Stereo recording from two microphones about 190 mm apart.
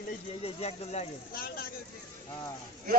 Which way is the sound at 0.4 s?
35° left (ahead or behind).